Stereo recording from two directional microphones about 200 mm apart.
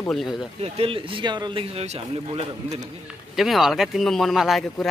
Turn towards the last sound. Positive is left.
turn(degrees=0)  # may be behind; listen again after turning